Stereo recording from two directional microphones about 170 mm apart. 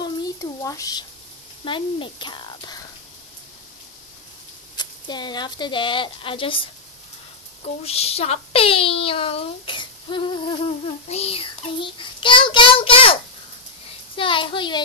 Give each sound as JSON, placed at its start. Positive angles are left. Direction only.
{"t": 0.0, "sound": "a sound", "side_deg": 20}
{"t": 1.6, "sound": "speech", "side_deg": 30}
{"t": 4.7, "sound": "a child's voice", "side_deg": 25}